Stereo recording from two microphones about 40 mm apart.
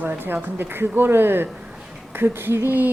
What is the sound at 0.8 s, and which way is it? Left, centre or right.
Speech, right.